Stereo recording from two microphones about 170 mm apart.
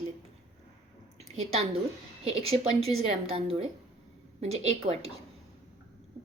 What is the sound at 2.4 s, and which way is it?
A woman's voice, 35° right (ahead or behind).